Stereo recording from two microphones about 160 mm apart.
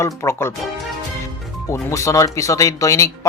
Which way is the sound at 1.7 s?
20° left (ahead or behind).